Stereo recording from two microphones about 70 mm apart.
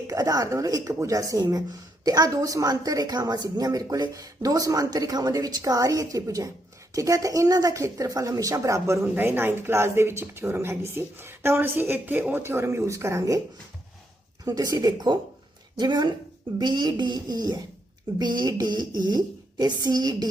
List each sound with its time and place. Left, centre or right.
0.1 s a woman's voice: right
8.0 s speech: right
9.1 s speech: right
14.4 s speech: right
15.7 s a woman's voice: right
18.2 s a woman's voice: right